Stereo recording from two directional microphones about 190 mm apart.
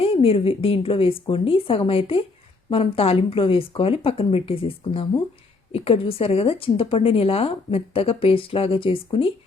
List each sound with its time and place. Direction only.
0.0 s a woman's voice: 30° left (ahead or behind)